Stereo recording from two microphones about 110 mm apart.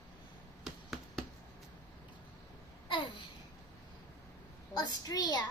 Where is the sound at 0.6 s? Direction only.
Centre (ahead or behind).